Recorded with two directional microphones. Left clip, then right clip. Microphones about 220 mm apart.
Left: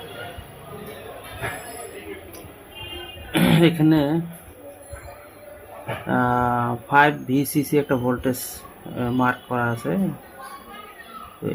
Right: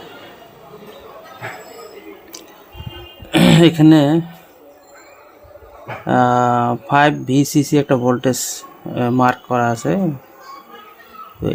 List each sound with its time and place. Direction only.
3.3 s speech: 45° right (ahead or behind)
6.1 s speech: 40° right (ahead or behind)